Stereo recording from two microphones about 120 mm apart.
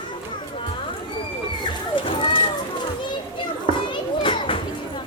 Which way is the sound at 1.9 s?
45° left (ahead or behind).